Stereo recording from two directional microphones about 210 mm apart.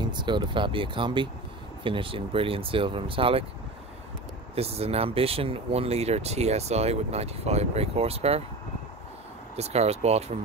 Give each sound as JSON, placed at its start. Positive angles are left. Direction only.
{"t": 0.0, "sound": "speech", "side_deg": -20}
{"t": 4.6, "sound": "speech", "side_deg": -30}
{"t": 9.6, "sound": "speech", "side_deg": -30}